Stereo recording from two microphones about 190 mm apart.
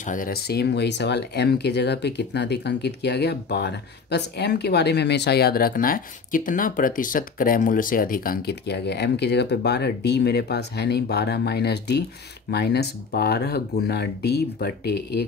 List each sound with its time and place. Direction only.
0.0 s speech: 45° left (ahead or behind)